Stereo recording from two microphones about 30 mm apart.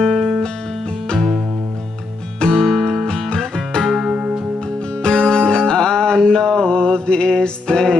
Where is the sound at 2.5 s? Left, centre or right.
Centre.